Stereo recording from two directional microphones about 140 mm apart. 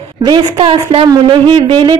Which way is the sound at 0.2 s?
40° right (ahead or behind).